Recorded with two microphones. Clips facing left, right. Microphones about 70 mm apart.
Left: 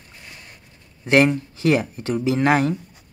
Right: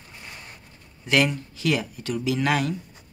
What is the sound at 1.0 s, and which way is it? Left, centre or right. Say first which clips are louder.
Speech: left 6 dB; left.